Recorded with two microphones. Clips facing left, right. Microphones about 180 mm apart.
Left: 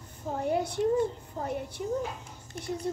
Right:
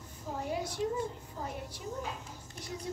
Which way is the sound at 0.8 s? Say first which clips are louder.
Left 7 dB; 50° left (ahead or behind).